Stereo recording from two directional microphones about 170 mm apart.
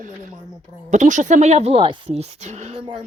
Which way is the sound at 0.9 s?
45° right (ahead or behind).